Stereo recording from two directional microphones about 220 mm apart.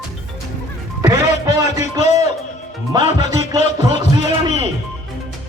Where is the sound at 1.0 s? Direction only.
15° right (ahead or behind).